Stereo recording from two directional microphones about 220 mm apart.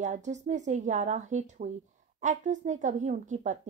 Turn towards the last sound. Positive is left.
turn(degrees=-35)  # may be behind; listen again after turning